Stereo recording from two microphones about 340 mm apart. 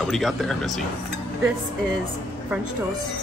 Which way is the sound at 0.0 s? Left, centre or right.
Centre.